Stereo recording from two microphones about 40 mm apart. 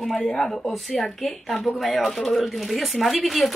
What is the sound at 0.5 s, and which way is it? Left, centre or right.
A woman's voice, centre.